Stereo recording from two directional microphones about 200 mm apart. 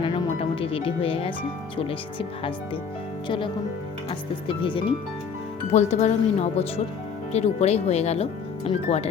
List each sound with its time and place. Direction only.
0.0 s music: 25° left (ahead or behind)
1.7 s speech: 25° left (ahead or behind)